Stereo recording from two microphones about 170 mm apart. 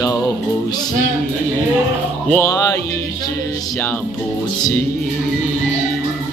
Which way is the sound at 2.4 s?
20° left (ahead or behind).